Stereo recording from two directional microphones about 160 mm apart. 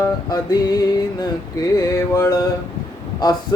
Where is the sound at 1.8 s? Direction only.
20° left (ahead or behind).